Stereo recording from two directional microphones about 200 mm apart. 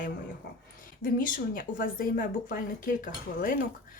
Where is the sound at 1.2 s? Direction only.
40° left (ahead or behind).